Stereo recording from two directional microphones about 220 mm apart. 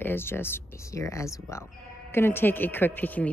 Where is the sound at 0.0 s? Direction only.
10° left (ahead or behind).